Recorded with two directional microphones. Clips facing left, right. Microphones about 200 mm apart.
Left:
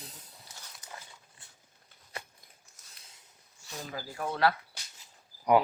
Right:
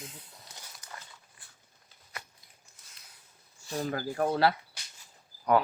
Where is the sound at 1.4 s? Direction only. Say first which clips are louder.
Left 1 dB; 25° left (ahead or behind).